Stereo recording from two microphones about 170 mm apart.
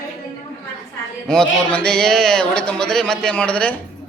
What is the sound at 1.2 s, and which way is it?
A man's voice, 5° left (ahead or behind).